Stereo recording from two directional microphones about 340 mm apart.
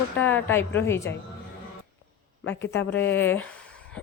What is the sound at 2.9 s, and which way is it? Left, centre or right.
Speech, left.